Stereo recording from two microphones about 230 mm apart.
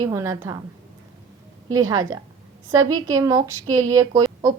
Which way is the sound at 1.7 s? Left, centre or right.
Centre.